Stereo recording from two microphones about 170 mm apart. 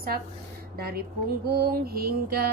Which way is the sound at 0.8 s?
65° right (ahead or behind).